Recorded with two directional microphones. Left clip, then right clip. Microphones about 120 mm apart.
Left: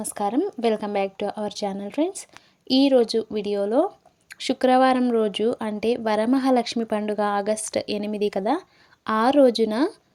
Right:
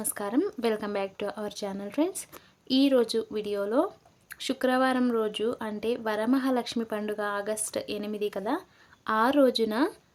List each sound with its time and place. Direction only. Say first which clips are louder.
0.0 s speech: left 5 dB; 25° left (ahead or behind)